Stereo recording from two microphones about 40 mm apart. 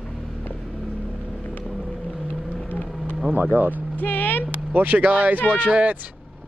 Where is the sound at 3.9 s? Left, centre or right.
Left.